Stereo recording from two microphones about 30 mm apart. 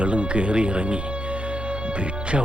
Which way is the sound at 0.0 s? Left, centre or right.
Right.